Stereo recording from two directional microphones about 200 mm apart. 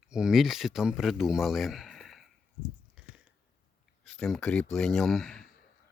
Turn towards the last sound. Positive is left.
turn(degrees=5)  # may be behind; listen again after turning